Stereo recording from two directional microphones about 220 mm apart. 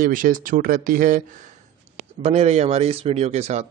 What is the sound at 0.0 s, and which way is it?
Speech, 40° right (ahead or behind).